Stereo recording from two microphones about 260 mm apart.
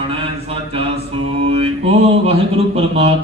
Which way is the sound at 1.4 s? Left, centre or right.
Right.